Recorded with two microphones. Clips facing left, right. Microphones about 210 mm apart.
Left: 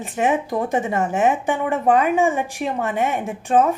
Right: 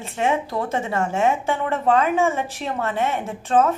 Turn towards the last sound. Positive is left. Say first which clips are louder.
# left 1 dB
turn(degrees=15)  # may be behind; listen again after turning